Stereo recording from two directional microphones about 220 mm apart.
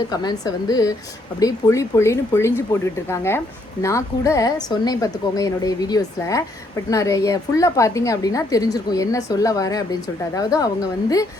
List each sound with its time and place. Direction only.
0.1 s a woman's voice: 20° left (ahead or behind)